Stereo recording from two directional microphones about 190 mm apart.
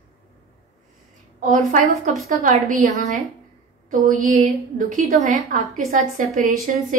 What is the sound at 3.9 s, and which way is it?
A woman's voice, 40° right (ahead or behind).